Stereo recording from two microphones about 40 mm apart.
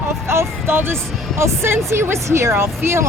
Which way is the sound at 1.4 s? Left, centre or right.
Right.